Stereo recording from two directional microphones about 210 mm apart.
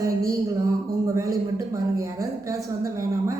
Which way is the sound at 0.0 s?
15° right (ahead or behind).